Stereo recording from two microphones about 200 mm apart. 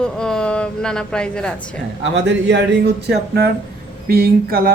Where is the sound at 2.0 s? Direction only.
60° right (ahead or behind).